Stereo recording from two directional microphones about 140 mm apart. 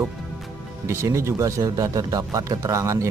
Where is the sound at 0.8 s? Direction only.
20° right (ahead or behind).